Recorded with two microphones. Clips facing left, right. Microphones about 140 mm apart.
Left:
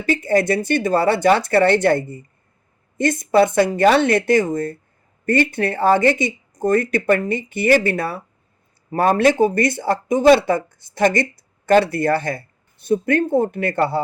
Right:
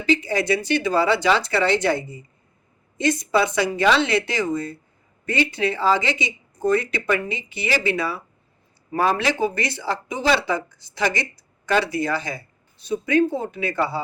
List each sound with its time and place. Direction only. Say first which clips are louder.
0.0 s speech: left 4 dB; 50° left (ahead or behind)